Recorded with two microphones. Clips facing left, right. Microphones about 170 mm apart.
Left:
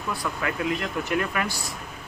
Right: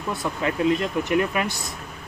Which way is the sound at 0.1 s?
25° right (ahead or behind).